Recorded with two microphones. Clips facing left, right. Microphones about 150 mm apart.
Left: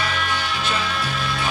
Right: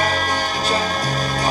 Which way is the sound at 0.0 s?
40° right (ahead or behind).